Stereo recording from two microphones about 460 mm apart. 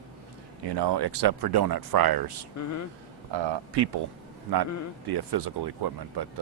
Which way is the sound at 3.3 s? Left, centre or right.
Right.